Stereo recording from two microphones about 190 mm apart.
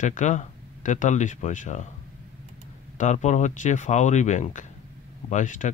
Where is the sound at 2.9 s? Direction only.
40° left (ahead or behind).